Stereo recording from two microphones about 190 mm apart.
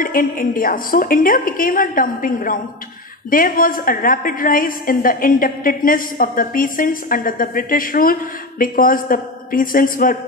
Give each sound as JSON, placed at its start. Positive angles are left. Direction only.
{"t": 0.0, "sound": "a woman's voice", "side_deg": 45}